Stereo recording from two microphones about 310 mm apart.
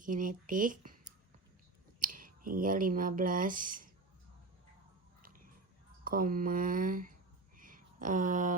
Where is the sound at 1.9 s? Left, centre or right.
Right.